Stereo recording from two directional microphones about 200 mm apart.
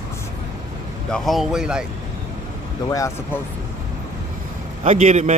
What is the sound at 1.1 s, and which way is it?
Speech, centre (ahead or behind).